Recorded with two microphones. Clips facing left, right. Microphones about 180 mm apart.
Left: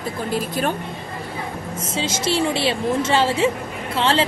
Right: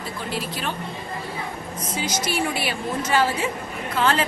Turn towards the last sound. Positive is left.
turn(degrees=30)  # may be behind; listen again after turning